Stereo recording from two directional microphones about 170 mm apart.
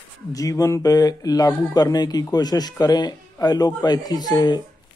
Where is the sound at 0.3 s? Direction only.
20° left (ahead or behind).